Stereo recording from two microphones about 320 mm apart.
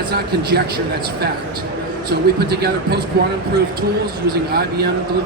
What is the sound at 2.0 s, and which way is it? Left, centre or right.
Speech, right.